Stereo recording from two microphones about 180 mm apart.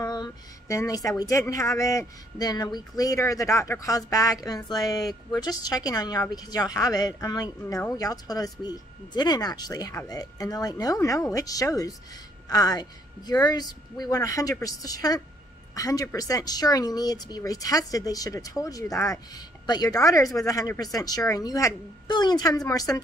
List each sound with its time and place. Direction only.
0.0 s a woman's voice: 20° left (ahead or behind)